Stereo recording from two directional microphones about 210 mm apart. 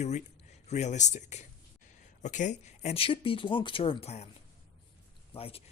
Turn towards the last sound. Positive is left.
turn(degrees=25)  # may be behind; listen again after turning